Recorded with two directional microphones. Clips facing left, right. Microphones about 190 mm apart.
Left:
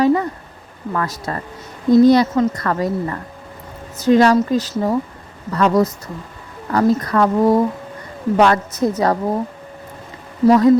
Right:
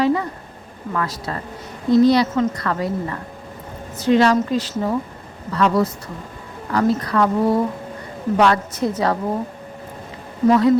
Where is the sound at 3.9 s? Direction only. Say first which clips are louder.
Left 3 dB; 40° left (ahead or behind).